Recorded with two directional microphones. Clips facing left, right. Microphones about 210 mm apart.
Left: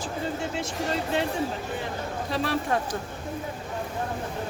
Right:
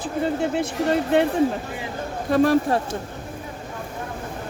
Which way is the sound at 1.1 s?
60° right (ahead or behind).